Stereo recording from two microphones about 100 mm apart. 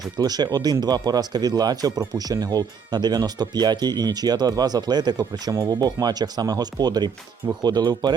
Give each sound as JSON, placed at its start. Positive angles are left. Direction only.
{"t": 0.2, "sound": "speech", "side_deg": -40}